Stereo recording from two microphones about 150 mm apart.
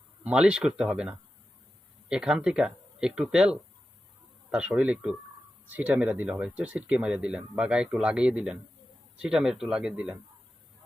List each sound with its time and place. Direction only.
0.3 s speech: 5° right (ahead or behind)